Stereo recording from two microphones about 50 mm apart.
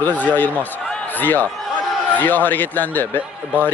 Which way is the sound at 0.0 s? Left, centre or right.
Left.